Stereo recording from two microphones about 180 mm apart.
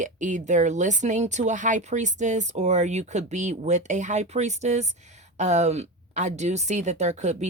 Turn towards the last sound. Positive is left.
turn(degrees=-40)  # may be behind; listen again after turning